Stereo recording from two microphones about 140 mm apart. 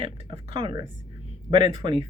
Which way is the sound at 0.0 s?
40° right (ahead or behind).